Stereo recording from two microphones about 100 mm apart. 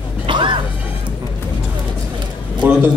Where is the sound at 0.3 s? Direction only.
55° right (ahead or behind).